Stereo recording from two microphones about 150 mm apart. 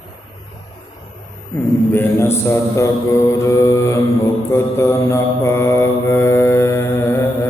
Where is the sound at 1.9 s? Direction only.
15° left (ahead or behind).